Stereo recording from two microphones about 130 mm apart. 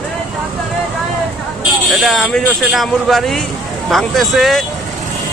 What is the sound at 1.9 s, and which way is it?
A man's voice, centre (ahead or behind).